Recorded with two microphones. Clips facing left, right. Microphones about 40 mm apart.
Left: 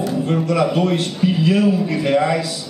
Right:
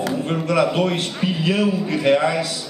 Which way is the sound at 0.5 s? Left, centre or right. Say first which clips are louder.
Right 1 dB; right.